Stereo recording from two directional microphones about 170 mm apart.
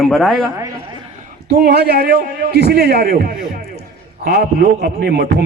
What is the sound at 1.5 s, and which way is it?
A man's voice, 70° right (ahead or behind).